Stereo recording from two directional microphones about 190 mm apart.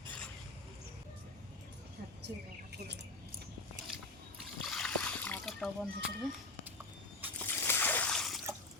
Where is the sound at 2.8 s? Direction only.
60° right (ahead or behind).